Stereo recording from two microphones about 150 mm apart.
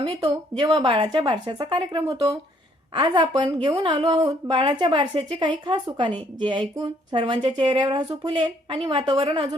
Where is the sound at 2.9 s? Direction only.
30° right (ahead or behind).